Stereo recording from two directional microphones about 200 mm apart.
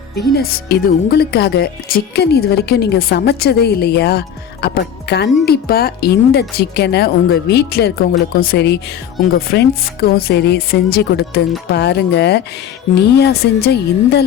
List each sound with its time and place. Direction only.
0.2 s a woman's voice: 55° left (ahead or behind)